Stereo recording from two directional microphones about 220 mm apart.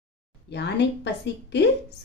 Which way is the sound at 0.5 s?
50° left (ahead or behind).